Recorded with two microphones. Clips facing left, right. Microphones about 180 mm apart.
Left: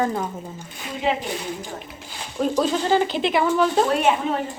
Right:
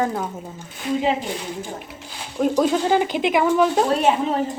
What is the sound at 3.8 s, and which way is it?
Speech, 30° right (ahead or behind).